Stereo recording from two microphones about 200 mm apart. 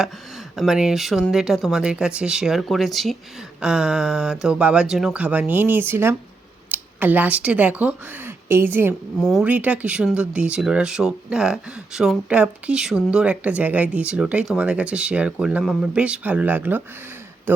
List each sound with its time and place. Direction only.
0.5 s speech: centre (ahead or behind)